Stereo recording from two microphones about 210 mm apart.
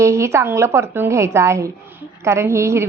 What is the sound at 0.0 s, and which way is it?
A woman's voice, 15° right (ahead or behind).